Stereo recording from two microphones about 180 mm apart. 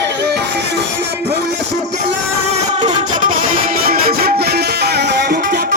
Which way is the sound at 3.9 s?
60° right (ahead or behind).